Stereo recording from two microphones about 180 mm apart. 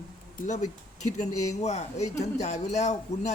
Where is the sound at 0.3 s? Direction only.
40° left (ahead or behind).